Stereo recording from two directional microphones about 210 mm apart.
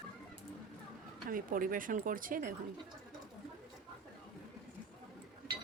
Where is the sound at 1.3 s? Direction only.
40° right (ahead or behind).